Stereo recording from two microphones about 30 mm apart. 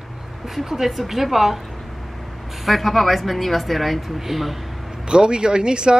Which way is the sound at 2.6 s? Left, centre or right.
Centre.